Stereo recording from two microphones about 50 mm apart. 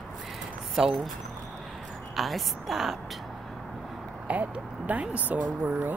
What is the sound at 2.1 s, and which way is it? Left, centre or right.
Speech, centre.